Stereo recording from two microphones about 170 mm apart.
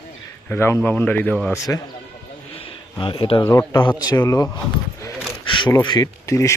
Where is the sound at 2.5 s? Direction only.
30° left (ahead or behind).